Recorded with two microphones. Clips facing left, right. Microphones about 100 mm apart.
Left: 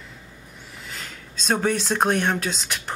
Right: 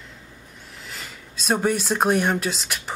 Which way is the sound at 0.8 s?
Centre (ahead or behind).